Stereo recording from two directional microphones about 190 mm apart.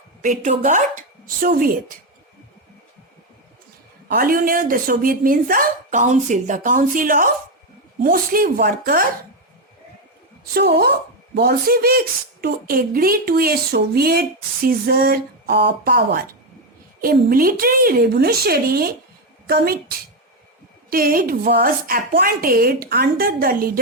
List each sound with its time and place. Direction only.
0.2 s speech: 40° right (ahead or behind)
4.1 s a woman's voice: 50° right (ahead or behind)
10.5 s a woman's voice: 55° right (ahead or behind)
20.9 s a woman's voice: 50° right (ahead or behind)